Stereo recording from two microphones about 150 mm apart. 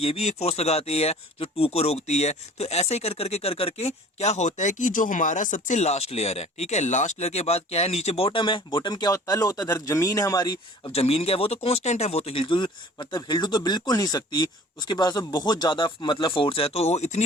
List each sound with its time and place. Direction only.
0.0 s speech: 45° left (ahead or behind); by 10.9 s 25° left (ahead or behind)
10.9 s speech: 40° left (ahead or behind)